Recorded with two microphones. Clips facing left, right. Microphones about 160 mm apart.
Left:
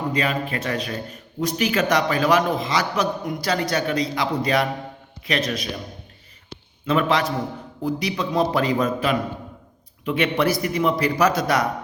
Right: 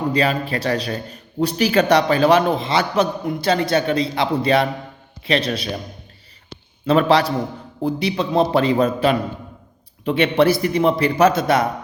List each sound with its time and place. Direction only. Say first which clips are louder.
0.1 s a man's voice: right 5 dB; 30° right (ahead or behind)
6.8 s a man's voice: right 5 dB; 35° right (ahead or behind)